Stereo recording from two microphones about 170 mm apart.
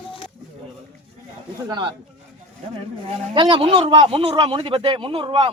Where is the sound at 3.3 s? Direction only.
30° right (ahead or behind).